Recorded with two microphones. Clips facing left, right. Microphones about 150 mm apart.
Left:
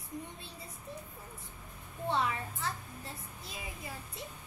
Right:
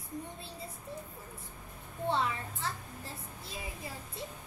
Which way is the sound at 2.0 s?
30° right (ahead or behind).